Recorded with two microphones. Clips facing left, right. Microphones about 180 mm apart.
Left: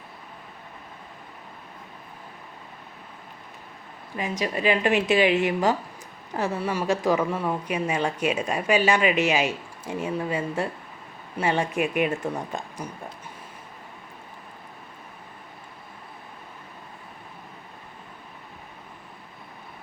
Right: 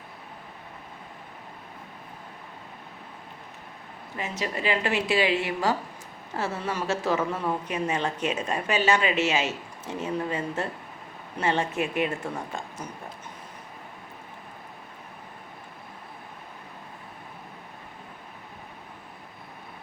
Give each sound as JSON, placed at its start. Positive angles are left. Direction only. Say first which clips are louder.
{"t": 4.2, "sound": "a woman's voice", "louder": "left 4 dB", "side_deg": 15}